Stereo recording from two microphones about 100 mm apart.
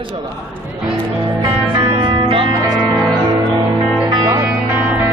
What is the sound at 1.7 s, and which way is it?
Music, 55° right (ahead or behind).